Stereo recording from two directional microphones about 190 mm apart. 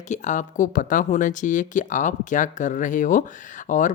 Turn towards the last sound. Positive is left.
turn(degrees=40)  # may be behind; listen again after turning